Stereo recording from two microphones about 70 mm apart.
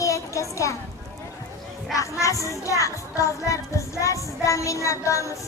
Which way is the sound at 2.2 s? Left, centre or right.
Left.